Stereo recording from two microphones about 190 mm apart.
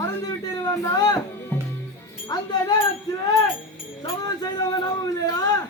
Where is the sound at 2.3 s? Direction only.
25° left (ahead or behind).